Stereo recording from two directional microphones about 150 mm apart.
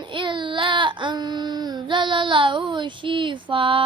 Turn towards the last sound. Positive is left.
turn(degrees=-35)  # may be behind; listen again after turning